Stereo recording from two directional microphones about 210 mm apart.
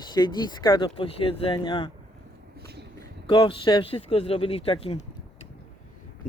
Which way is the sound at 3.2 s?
25° left (ahead or behind).